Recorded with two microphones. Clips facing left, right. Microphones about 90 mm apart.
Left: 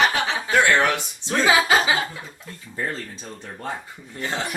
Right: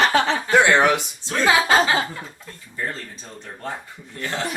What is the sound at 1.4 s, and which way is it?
Speech, 5° left (ahead or behind).